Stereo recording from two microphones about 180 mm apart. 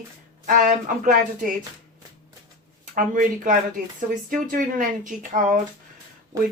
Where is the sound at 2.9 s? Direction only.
45° right (ahead or behind).